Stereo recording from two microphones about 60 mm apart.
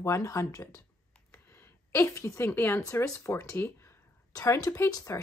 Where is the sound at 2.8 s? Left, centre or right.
Left.